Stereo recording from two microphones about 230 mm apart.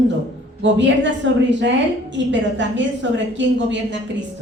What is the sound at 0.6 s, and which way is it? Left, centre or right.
A woman's voice, right.